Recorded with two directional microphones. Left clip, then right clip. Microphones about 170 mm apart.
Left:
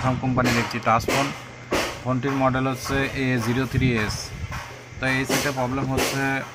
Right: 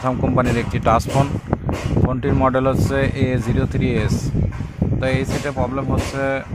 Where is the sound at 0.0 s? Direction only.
40° right (ahead or behind).